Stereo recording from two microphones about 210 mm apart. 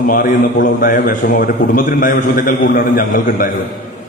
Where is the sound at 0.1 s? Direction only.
45° left (ahead or behind).